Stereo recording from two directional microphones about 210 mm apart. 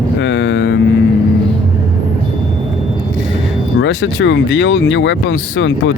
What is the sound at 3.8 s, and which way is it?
Speech, 60° left (ahead or behind).